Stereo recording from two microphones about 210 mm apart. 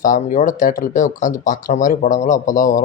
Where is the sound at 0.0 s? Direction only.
40° left (ahead or behind).